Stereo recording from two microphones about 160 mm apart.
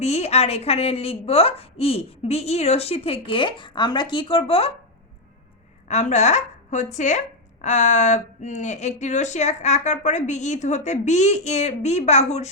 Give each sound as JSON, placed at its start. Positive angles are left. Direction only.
{"t": 0.0, "sound": "a woman's voice", "side_deg": 40}
{"t": 5.9, "sound": "speech", "side_deg": 45}